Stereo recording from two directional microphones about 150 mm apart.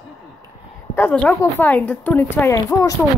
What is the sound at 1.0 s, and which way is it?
Speech, 10° left (ahead or behind).